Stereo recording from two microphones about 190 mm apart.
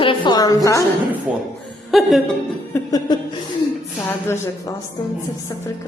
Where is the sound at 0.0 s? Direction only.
25° left (ahead or behind).